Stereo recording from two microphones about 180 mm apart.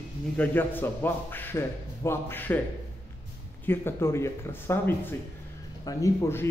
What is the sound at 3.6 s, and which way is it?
Speech, 10° left (ahead or behind).